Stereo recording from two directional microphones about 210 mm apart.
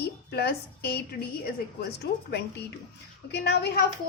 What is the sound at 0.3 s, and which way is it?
Speech, 50° left (ahead or behind).